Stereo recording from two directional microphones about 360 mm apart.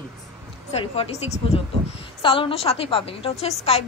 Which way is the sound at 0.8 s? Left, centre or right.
Centre.